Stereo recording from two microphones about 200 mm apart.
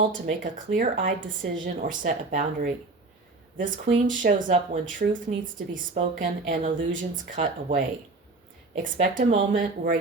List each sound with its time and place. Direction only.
0.1 s speech: 50° right (ahead or behind)
0.9 s a woman's voice: 70° right (ahead or behind)
1.6 s speech: 45° right (ahead or behind)